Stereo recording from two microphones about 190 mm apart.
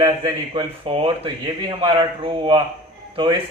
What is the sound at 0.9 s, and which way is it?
A man's voice, 30° right (ahead or behind).